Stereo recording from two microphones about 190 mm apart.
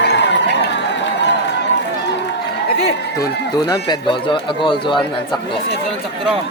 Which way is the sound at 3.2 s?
20° left (ahead or behind).